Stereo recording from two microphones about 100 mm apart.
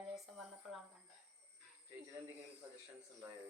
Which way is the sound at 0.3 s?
5° right (ahead or behind).